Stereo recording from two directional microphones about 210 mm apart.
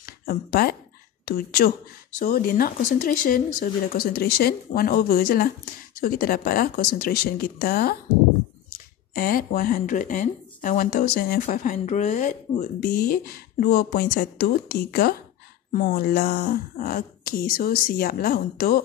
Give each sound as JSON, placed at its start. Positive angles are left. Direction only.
{"t": 0.0, "sound": "a sound", "side_deg": 45}
{"t": 1.2, "sound": "speech", "side_deg": 45}
{"t": 9.1, "sound": "speech", "side_deg": 45}